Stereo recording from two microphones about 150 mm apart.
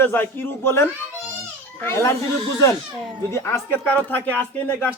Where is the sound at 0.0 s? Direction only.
15° left (ahead or behind).